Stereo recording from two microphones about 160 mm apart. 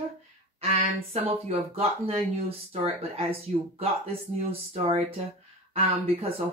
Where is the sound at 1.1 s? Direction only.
40° right (ahead or behind).